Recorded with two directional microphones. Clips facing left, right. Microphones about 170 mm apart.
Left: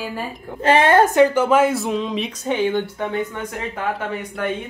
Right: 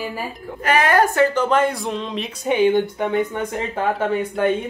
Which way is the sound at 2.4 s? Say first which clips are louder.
Right 5 dB; 15° right (ahead or behind).